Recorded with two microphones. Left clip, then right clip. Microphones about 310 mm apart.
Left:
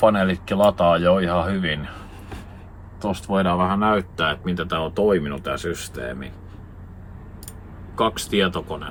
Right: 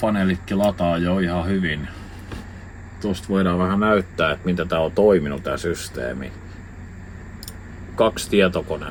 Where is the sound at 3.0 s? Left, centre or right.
Centre.